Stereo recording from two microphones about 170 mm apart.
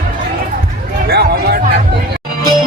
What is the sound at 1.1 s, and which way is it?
Speech, 70° right (ahead or behind).